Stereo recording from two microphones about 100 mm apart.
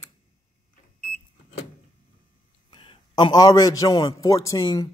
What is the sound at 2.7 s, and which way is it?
A man's voice, 55° left (ahead or behind).